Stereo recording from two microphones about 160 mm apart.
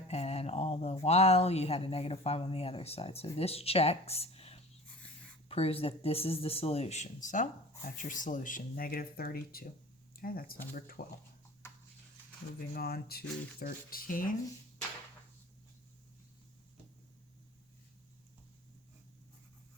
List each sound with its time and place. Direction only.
0.1 s speech: 40° left (ahead or behind); by 11.0 s 65° left (ahead or behind)
12.7 s speech: 70° left (ahead or behind)